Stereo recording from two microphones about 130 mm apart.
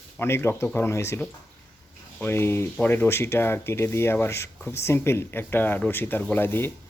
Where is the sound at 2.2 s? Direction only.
20° left (ahead or behind).